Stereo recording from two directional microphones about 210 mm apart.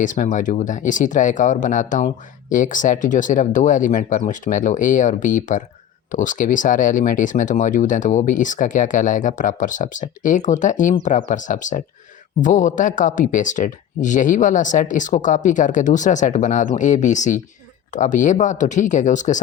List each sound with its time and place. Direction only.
0.0 s speech: 40° left (ahead or behind)